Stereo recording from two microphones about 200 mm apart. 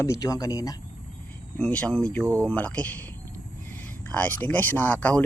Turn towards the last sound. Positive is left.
turn(degrees=5)  # may be behind; listen again after turning